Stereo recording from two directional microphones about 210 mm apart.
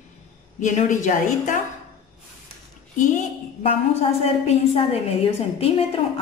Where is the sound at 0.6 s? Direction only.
35° left (ahead or behind).